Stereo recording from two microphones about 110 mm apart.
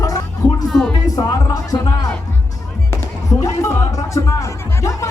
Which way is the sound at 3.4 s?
30° left (ahead or behind).